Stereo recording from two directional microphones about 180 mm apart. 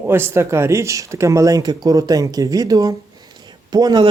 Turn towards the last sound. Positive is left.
turn(degrees=-25)  # may be behind; listen again after turning